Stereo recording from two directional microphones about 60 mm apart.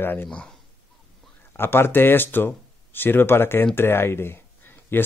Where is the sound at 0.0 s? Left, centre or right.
Left.